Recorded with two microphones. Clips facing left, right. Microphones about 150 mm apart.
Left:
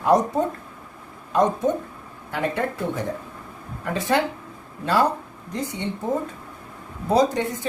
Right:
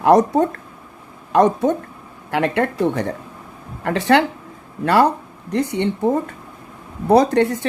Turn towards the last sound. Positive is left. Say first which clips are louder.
# right 6 dB
turn(degrees=-65)  # may be behind; listen again after turning